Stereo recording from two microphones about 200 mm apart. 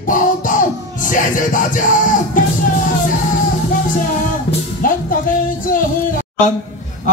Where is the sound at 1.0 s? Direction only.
40° left (ahead or behind).